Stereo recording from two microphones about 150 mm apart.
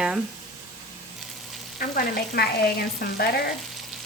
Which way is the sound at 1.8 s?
80° left.